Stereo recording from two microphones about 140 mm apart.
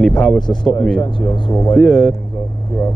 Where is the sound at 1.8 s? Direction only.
5° left (ahead or behind).